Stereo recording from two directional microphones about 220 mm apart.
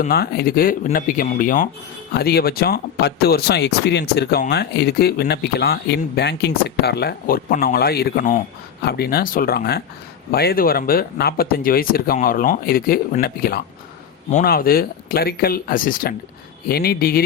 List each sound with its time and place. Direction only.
0.0 s speech: 45° left (ahead or behind)